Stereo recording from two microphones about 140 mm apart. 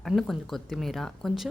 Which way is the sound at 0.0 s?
Centre (ahead or behind).